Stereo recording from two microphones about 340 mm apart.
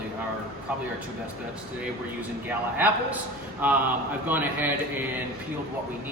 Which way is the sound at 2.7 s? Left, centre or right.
Centre.